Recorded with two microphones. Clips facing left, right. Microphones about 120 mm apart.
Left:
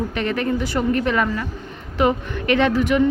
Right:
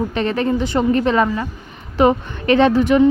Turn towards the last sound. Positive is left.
turn(degrees=-30)  # may be behind; listen again after turning